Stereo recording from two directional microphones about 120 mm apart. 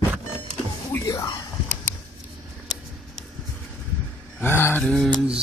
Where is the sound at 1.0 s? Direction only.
35° left (ahead or behind).